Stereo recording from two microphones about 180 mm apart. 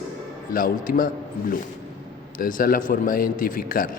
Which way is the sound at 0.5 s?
50° left (ahead or behind).